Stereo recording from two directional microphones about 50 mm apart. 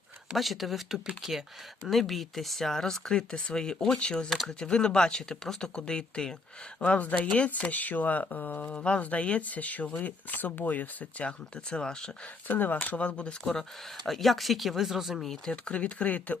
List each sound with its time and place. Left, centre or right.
0.3 s speech: centre; by 7.5 s left
7.5 s speech: left
8.6 s speech: left
11.3 s speech: centre
12.5 s speech: left
13.1 s speech: left
14.0 s speech: centre
15.3 s speech: centre
15.7 s speech: left